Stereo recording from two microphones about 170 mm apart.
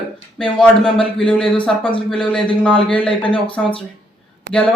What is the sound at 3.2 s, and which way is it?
Speech, 30° left (ahead or behind).